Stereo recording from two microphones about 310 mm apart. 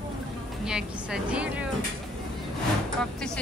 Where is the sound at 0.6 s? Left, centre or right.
Centre.